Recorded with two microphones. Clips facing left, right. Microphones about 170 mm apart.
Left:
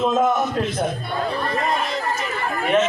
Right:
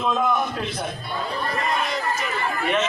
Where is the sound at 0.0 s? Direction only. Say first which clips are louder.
Left 4 dB; 40° left (ahead or behind).